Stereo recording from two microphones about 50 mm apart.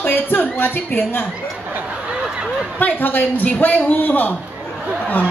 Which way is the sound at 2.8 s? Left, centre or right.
Left.